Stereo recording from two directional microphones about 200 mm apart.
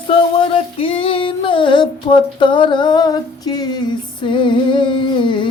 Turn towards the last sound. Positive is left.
turn(degrees=25)  # may be behind; listen again after turning